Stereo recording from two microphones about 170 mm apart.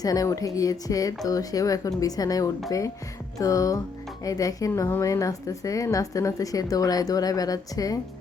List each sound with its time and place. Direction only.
0.0 s a woman's voice: 20° left (ahead or behind)